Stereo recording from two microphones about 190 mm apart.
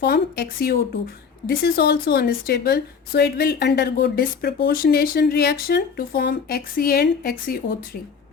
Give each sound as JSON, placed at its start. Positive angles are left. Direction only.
{"t": 0.0, "sound": "a woman's voice", "side_deg": 60}